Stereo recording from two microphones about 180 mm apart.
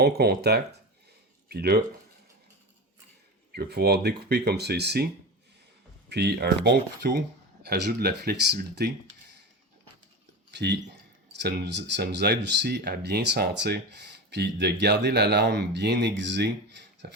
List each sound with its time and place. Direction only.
0.0 s speech: 60° right (ahead or behind)
3.5 s speech: 60° right (ahead or behind)
6.1 s speech: 65° right (ahead or behind)
10.5 s speech: 70° right (ahead or behind)